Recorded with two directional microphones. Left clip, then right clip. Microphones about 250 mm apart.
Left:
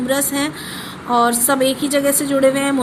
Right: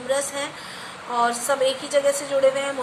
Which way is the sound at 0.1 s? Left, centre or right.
Left.